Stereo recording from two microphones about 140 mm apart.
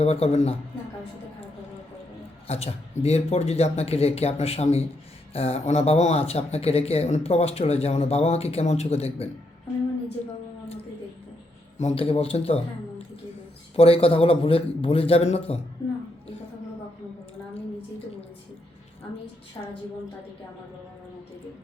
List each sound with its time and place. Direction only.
0.0 s speech: 45° left (ahead or behind)
2.5 s speech: 50° left (ahead or behind)
11.8 s speech: 45° left (ahead or behind)
13.7 s speech: 45° left (ahead or behind)
19.6 s a woman's voice: 25° left (ahead or behind)